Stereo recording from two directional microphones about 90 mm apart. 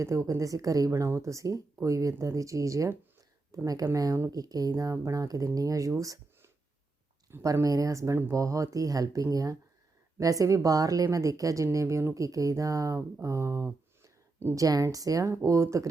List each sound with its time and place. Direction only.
0.0 s speech: 35° right (ahead or behind)
14.0 s a sound: 25° right (ahead or behind)
14.5 s speech: 40° right (ahead or behind)